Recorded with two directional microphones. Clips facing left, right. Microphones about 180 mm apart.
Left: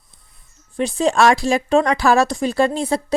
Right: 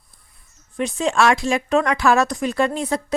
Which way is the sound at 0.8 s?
35° left (ahead or behind).